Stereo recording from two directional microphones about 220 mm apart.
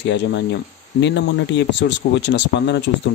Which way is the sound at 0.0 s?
50° left (ahead or behind).